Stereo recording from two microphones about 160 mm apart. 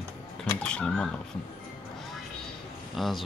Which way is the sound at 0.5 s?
5° left (ahead or behind).